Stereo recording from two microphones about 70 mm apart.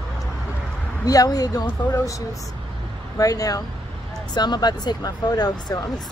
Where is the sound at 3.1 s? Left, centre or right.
Left.